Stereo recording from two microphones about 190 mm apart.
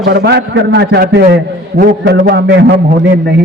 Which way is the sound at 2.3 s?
60° right (ahead or behind).